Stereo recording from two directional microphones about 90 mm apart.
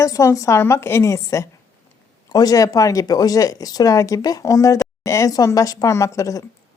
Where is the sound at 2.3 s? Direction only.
45° left (ahead or behind).